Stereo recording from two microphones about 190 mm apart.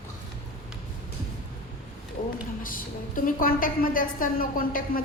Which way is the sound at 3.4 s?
45° left (ahead or behind).